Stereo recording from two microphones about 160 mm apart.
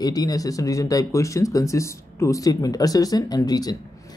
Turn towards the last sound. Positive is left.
turn(degrees=25)  # may be behind; listen again after turning